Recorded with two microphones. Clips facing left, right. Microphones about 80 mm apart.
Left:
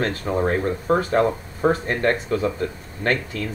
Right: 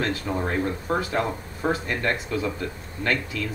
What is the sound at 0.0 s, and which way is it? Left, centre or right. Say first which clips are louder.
Speech: left 2 dB; left.